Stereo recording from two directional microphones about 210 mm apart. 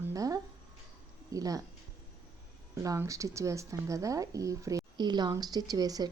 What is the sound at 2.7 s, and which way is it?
A woman's voice, 15° right (ahead or behind).